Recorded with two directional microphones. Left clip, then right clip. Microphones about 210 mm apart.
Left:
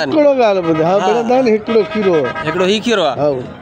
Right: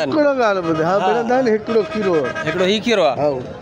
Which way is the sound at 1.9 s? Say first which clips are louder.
Left 4 dB; 55° right (ahead or behind).